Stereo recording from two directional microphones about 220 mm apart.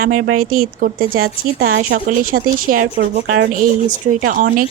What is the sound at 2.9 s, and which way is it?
Speech, 55° right (ahead or behind).